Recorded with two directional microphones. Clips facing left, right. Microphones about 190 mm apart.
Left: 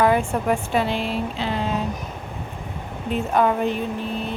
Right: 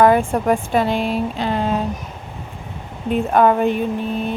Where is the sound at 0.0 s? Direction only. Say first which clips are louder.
Right 5 dB; 50° right (ahead or behind).